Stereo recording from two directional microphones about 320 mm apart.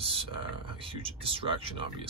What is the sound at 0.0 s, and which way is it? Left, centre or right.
Speech, centre.